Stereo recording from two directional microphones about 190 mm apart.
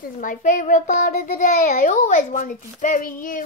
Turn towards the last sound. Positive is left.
turn(degrees=45)  # may be behind; listen again after turning